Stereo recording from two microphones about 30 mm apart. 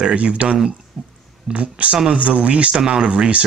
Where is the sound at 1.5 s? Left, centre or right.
Right.